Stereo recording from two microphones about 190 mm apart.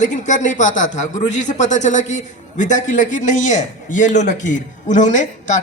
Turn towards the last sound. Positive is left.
turn(degrees=40)  # may be behind; listen again after turning